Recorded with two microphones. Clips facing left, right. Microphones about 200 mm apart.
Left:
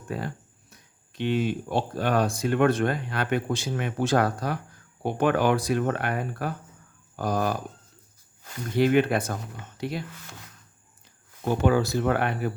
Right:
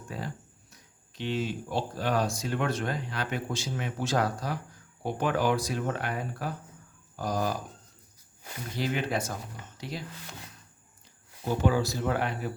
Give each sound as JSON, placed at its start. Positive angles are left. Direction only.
{"t": 0.1, "sound": "speech", "side_deg": 60}
{"t": 8.7, "sound": "speech", "side_deg": 60}
{"t": 11.4, "sound": "speech", "side_deg": 60}